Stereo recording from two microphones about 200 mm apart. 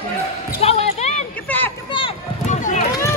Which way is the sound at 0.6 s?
30° left (ahead or behind).